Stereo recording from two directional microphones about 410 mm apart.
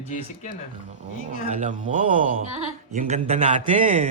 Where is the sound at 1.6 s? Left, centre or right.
Centre.